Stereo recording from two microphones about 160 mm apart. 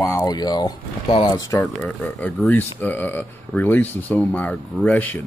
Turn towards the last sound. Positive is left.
turn(degrees=10)  # may be behind; listen again after turning